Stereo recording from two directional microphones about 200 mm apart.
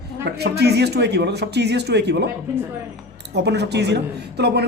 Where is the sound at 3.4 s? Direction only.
55° right (ahead or behind).